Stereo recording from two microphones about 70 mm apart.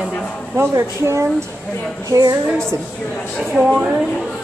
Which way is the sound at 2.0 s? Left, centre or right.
Right.